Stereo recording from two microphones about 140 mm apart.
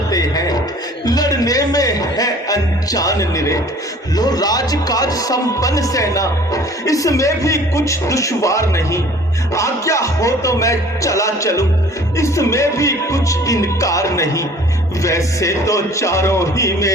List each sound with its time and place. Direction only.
0.1 s music: 25° left (ahead or behind)
1.0 s speech: 25° left (ahead or behind)